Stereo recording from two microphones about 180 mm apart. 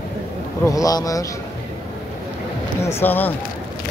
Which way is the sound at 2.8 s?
15° left (ahead or behind).